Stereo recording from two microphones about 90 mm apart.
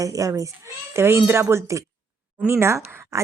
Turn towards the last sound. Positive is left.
turn(degrees=-30)  # may be behind; listen again after turning